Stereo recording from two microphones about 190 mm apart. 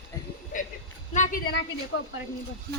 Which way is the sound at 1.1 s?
45° left (ahead or behind).